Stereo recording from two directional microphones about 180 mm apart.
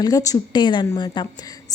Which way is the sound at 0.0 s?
20° left (ahead or behind).